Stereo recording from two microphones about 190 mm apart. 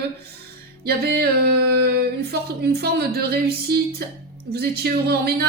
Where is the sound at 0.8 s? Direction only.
55° right (ahead or behind).